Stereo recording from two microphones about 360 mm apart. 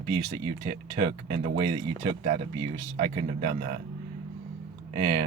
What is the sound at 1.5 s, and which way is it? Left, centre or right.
Speech, centre.